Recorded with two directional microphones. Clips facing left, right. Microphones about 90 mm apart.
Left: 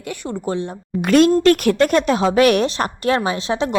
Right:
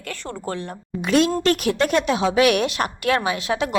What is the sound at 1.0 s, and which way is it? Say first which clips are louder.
Speech: left 6 dB; 50° left (ahead or behind).